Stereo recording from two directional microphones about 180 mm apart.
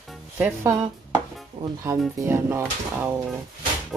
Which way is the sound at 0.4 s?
15° right (ahead or behind).